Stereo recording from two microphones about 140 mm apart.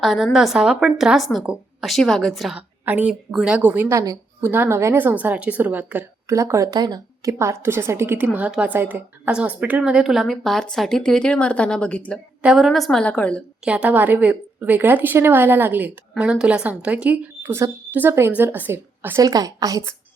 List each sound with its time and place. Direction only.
0.0 s a woman's voice: centre (ahead or behind)
12.4 s a woman's voice: 5° right (ahead or behind)
13.7 s a woman's voice: 10° right (ahead or behind)
19.2 s a woman's voice: 25° right (ahead or behind)